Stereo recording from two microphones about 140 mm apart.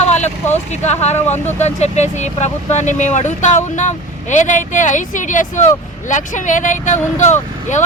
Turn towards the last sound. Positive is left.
turn(degrees=60)  # may be behind; listen again after turning